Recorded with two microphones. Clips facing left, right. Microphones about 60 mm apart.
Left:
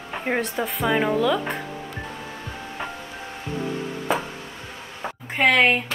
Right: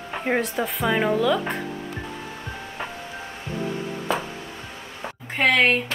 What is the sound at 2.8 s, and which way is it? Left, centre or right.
Music, centre.